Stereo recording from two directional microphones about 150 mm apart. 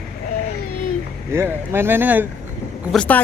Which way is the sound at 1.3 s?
15° right (ahead or behind).